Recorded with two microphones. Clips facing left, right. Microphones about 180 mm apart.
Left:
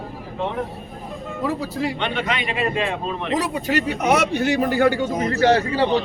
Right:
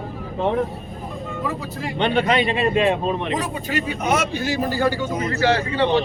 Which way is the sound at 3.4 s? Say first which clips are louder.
Left 3 dB; 70° left (ahead or behind).